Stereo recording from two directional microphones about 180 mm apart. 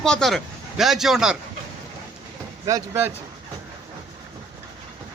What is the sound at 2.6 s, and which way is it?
Speech, 15° right (ahead or behind).